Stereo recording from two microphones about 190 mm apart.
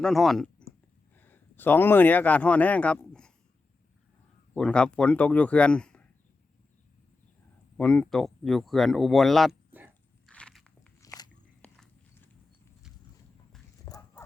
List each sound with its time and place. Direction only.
0.0 s speech: centre (ahead or behind)
4.5 s speech: 5° left (ahead or behind)
7.8 s speech: 5° left (ahead or behind)
10.2 s biting: 5° left (ahead or behind)
11.0 s biting: 20° left (ahead or behind)
11.6 s biting: 5° left (ahead or behind)
13.8 s dog: 20° left (ahead or behind)